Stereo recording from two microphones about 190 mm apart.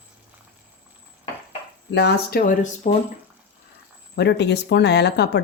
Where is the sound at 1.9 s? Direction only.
60° left (ahead or behind); by 2.9 s 45° left (ahead or behind).